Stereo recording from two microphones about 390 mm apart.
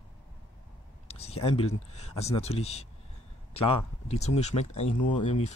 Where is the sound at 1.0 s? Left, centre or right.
Centre.